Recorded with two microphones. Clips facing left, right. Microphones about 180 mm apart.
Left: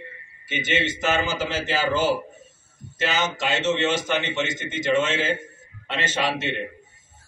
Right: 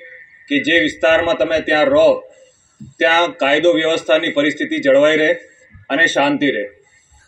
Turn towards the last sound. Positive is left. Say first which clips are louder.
# right 11 dB
turn(degrees=-60)  # may be behind; listen again after turning